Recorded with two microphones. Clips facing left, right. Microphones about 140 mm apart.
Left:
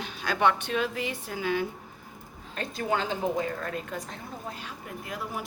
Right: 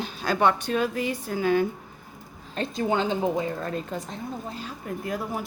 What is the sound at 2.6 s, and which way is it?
A woman's voice, 20° right (ahead or behind).